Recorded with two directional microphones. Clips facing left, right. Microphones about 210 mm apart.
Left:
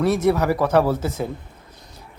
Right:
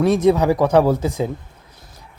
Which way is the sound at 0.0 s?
15° right (ahead or behind).